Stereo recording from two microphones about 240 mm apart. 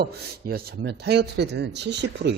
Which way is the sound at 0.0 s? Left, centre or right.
Right.